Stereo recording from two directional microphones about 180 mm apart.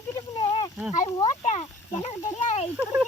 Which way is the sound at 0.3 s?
30° left (ahead or behind).